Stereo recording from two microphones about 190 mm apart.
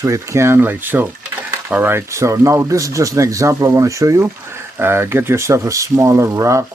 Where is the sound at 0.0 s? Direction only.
15° right (ahead or behind).